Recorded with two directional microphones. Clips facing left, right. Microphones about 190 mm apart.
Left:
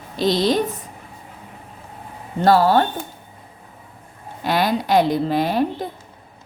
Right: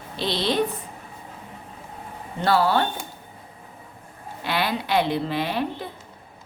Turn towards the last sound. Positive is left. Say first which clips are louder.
# left 6 dB
turn(degrees=40)  # may be behind; listen again after turning